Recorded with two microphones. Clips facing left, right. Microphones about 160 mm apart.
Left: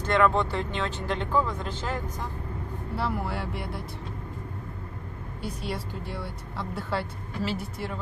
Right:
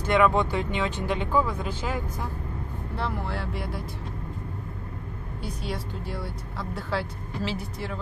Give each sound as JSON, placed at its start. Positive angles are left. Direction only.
{"t": 0.0, "sound": "speech", "side_deg": -10}
{"t": 3.0, "sound": "speech", "side_deg": 5}
{"t": 5.4, "sound": "speech", "side_deg": 0}